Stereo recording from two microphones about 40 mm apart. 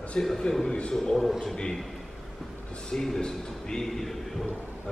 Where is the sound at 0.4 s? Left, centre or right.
Centre.